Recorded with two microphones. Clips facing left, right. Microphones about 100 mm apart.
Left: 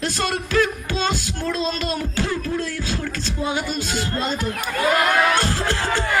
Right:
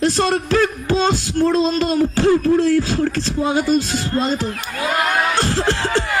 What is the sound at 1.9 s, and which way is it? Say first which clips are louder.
Music: right 9 dB; 40° right (ahead or behind).